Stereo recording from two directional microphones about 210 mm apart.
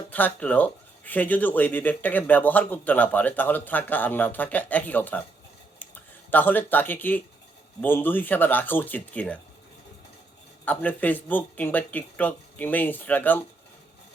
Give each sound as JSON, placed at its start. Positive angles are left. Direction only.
{"t": 0.1, "sound": "speech", "side_deg": 10}
{"t": 10.7, "sound": "speech", "side_deg": 10}